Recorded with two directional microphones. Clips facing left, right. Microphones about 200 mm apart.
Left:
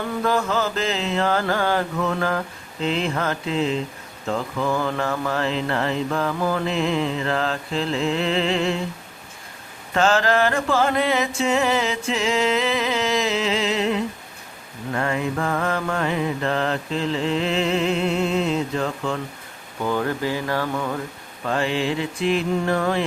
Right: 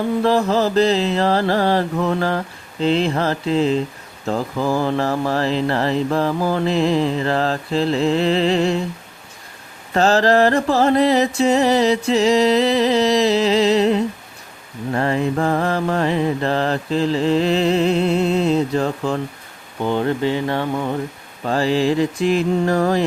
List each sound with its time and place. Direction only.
0.2 s mantra: 30° right (ahead or behind)
9.9 s mantra: 35° right (ahead or behind)
19.8 s speech: 25° right (ahead or behind)
21.4 s mantra: 35° right (ahead or behind)